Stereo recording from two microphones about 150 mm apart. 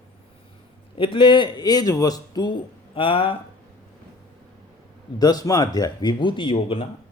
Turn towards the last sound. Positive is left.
turn(degrees=35)  # may be behind; listen again after turning